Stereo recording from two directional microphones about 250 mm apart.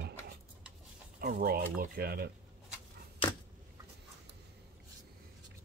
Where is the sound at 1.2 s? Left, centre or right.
Right.